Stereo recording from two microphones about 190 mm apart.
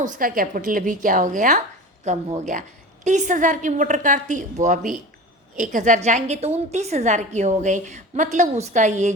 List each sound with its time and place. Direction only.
0.0 s a woman's voice: 45° right (ahead or behind)